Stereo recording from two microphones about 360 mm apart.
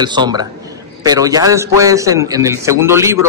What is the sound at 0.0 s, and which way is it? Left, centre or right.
A man's voice, centre.